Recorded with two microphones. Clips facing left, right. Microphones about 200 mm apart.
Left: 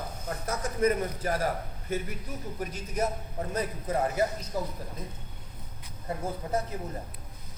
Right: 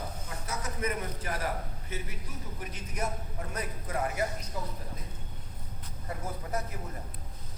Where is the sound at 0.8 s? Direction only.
40° left (ahead or behind).